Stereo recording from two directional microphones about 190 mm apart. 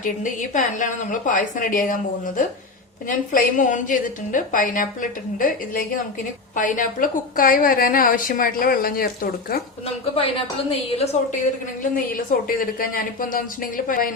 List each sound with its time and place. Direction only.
0.0 s a woman's voice: 40° left (ahead or behind)
10.7 s a woman's voice: 35° left (ahead or behind)
11.8 s a woman's voice: 45° left (ahead or behind)